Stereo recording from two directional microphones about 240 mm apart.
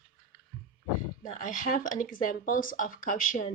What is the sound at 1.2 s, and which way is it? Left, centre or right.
Speech, left.